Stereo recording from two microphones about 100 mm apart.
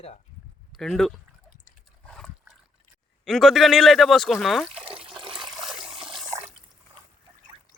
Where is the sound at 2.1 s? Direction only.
5° left (ahead or behind).